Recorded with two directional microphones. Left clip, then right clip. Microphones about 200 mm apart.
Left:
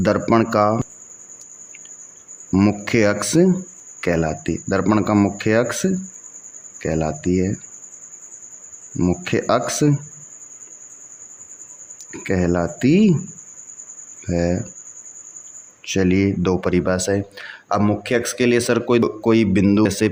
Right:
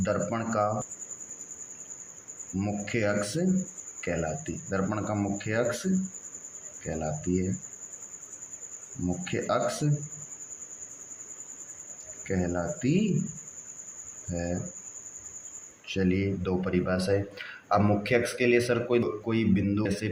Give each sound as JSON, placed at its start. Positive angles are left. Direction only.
{"t": 0.0, "sound": "speech", "side_deg": 50}
{"t": 2.6, "sound": "speech", "side_deg": 50}
{"t": 9.2, "sound": "speech", "side_deg": 50}
{"t": 12.2, "sound": "speech", "side_deg": 50}
{"t": 14.3, "sound": "speech", "side_deg": 50}
{"t": 15.9, "sound": "speech", "side_deg": 45}